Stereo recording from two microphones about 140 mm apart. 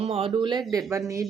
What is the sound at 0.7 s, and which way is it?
Speech, 20° right (ahead or behind).